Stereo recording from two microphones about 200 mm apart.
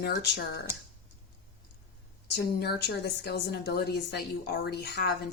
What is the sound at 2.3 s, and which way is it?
A woman's voice, 55° left (ahead or behind).